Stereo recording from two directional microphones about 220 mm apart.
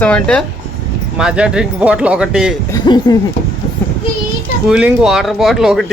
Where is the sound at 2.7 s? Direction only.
20° left (ahead or behind).